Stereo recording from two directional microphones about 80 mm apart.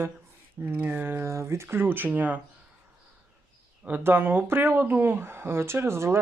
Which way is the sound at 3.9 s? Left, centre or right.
Right.